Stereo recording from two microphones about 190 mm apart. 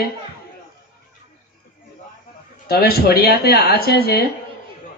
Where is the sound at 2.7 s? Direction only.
55° left (ahead or behind).